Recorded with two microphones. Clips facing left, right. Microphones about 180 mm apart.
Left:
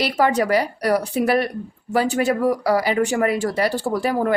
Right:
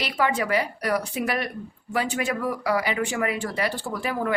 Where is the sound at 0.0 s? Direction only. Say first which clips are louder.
Left 6 dB; 40° left (ahead or behind).